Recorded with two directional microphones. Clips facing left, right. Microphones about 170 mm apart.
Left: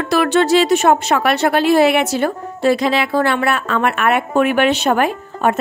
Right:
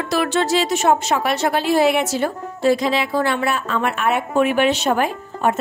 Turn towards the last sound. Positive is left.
turn(degrees=70)  # may be behind; listen again after turning